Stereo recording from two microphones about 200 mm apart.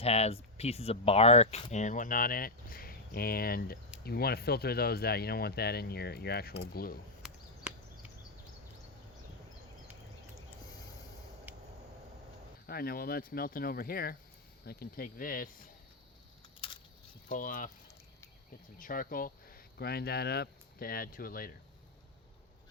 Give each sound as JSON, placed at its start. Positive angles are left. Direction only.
{"t": 0.0, "sound": "speech", "side_deg": 30}
{"t": 7.2, "sound": "chop", "side_deg": -5}
{"t": 11.5, "sound": "a sound", "side_deg": -10}
{"t": 12.6, "sound": "speech", "side_deg": 50}
{"t": 17.2, "sound": "speech", "side_deg": 45}
{"t": 18.8, "sound": "speech", "side_deg": 45}